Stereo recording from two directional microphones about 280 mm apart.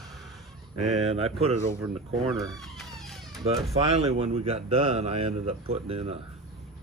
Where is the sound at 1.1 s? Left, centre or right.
Right.